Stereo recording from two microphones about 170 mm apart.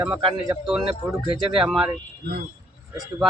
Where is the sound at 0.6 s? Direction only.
Centre (ahead or behind).